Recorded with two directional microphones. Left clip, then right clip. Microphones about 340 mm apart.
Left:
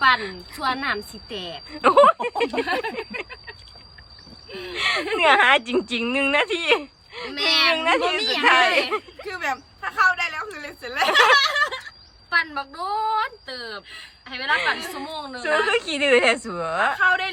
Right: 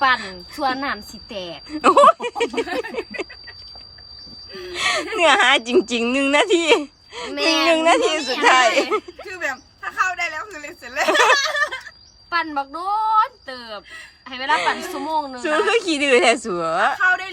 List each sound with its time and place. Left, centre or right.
0.2 s a woman's voice: centre
4.5 s speech: centre
9.9 s a sound: centre
12.4 s speech: centre
15.4 s a woman's voice: centre